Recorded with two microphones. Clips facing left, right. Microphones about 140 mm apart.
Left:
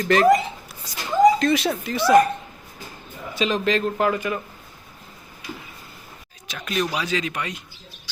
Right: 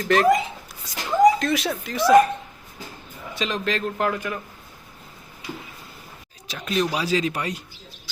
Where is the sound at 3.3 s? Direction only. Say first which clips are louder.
Left 4 dB; centre (ahead or behind).